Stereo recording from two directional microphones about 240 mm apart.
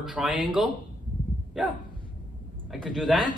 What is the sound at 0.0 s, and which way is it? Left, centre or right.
Speech, centre.